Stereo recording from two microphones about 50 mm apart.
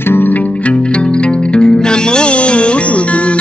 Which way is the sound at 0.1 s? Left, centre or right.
Left.